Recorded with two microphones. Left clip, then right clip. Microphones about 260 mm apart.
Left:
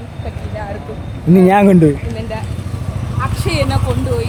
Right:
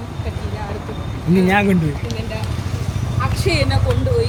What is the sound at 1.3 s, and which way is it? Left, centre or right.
Speech, centre.